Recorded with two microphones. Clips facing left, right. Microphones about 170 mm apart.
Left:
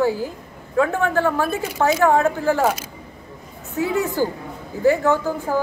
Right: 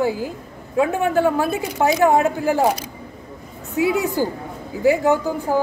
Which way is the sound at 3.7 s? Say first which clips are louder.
Right 2 dB; 15° right (ahead or behind).